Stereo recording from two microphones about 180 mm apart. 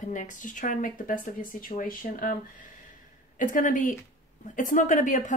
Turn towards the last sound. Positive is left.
turn(degrees=45)  # may be behind; listen again after turning